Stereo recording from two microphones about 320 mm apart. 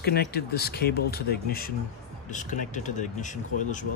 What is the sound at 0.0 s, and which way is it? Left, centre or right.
Speech, left.